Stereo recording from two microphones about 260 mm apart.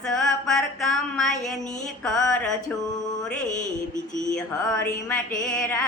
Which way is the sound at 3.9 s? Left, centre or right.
Left.